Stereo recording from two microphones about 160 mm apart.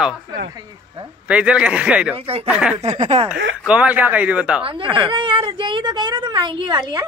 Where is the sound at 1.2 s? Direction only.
5° right (ahead or behind).